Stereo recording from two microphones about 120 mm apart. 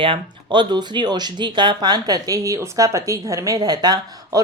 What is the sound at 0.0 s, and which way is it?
Speech, 45° right (ahead or behind).